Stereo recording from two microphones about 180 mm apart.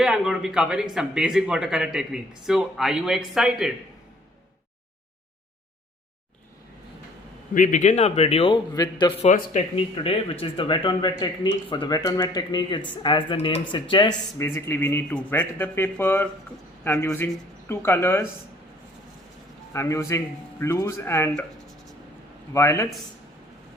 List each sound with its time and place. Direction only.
0.0 s speech: 5° right (ahead or behind)
7.5 s a man's voice: 45° left (ahead or behind); by 9.1 s 25° left (ahead or behind)
9.2 s a man's voice: 40° left (ahead or behind); by 18.3 s 15° left (ahead or behind)
19.7 s speech: 15° left (ahead or behind)
22.5 s speech: 15° left (ahead or behind)